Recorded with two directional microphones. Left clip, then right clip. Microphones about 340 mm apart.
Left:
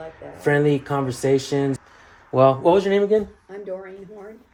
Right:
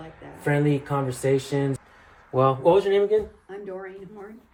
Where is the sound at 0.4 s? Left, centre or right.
Left.